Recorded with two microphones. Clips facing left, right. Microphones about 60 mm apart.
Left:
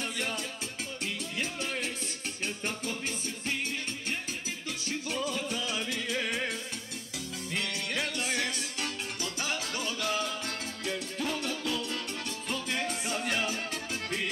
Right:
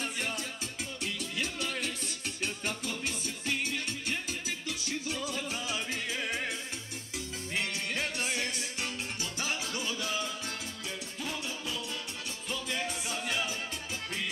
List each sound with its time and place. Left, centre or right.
0.2 s music: left
8.3 s music: left
12.4 s music: left